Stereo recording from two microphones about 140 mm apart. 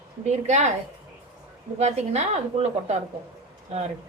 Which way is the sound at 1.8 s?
55° right (ahead or behind).